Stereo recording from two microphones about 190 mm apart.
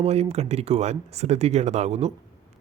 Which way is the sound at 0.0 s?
35° right (ahead or behind).